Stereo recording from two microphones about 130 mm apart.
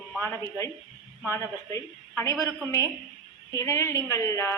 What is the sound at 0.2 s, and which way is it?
A man's voice, 15° left (ahead or behind).